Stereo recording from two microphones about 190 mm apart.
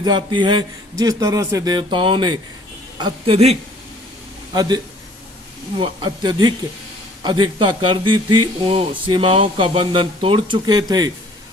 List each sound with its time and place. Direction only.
0.0 s a woman's voice: 25° right (ahead or behind)
5.8 s speech: 25° right (ahead or behind)